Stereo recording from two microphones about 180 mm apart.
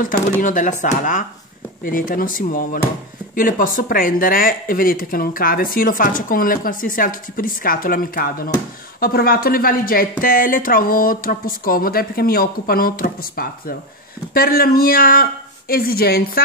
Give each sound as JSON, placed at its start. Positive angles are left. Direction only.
{"t": 0.4, "sound": "speech", "side_deg": 45}